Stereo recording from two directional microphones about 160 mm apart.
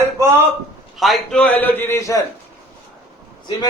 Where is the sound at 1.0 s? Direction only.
5° left (ahead or behind).